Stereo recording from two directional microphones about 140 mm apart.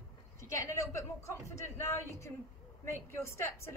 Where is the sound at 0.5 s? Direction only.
25° left (ahead or behind).